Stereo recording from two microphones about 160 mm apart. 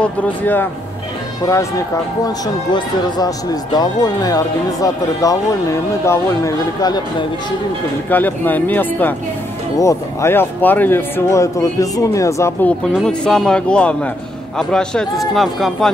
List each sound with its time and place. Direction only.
0.0 s speech: 10° left (ahead or behind)
2.2 s speech: 25° left (ahead or behind)
8.1 s speech: 10° left (ahead or behind)
12.8 s speech: 5° left (ahead or behind)